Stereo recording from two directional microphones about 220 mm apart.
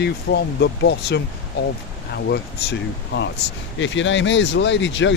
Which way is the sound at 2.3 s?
50° left (ahead or behind).